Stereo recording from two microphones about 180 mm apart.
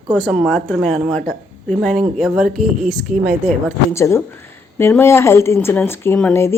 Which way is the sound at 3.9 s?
15° left (ahead or behind).